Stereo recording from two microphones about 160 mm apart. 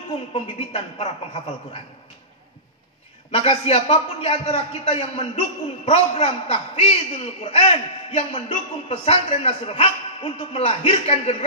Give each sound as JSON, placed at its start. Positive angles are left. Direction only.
{"t": 0.3, "sound": "a man's voice", "side_deg": 40}
{"t": 3.3, "sound": "a man's voice", "side_deg": 40}